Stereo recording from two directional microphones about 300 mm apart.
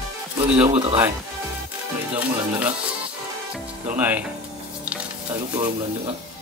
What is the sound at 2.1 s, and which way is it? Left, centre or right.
Speech, centre.